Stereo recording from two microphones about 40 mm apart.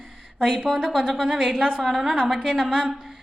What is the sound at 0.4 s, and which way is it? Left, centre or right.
Speech, centre.